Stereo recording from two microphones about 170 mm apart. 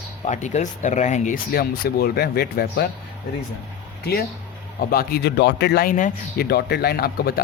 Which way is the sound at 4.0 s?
65° left (ahead or behind).